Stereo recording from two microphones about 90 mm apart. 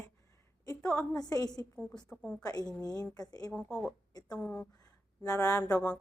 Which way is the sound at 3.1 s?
45° left (ahead or behind).